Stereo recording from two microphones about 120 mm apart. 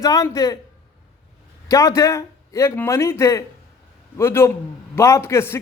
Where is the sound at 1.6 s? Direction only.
30° left (ahead or behind).